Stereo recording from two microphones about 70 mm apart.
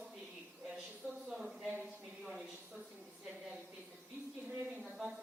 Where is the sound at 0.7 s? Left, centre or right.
Centre.